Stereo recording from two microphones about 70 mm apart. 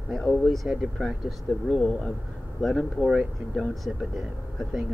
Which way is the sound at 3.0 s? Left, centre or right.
Centre.